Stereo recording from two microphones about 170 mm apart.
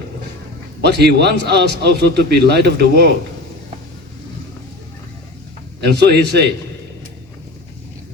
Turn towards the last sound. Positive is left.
turn(degrees=-75)  # may be behind; listen again after turning